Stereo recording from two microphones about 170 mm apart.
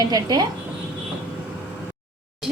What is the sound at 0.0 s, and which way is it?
Speech, 25° right (ahead or behind).